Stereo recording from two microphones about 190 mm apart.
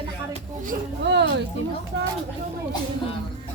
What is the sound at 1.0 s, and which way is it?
Speech, 65° right (ahead or behind).